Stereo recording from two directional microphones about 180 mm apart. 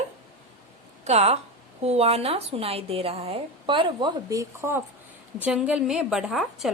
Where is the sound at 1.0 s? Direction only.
35° right (ahead or behind).